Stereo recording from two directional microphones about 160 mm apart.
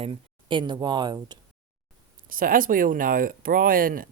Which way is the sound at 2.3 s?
60° right (ahead or behind).